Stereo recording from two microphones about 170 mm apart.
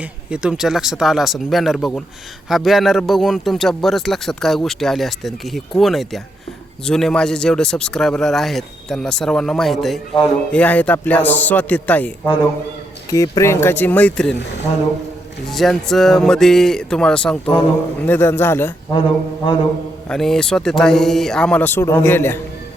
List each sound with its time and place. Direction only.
0.3 s a man's voice: 5° right (ahead or behind)
13.1 s a man's voice: 20° left (ahead or behind)
15.4 s a man's voice: centre (ahead or behind)
18.9 s a sound: 30° left (ahead or behind)
20.1 s a man's voice: 5° left (ahead or behind)